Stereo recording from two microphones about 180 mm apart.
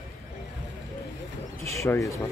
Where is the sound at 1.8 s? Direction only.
15° left (ahead or behind).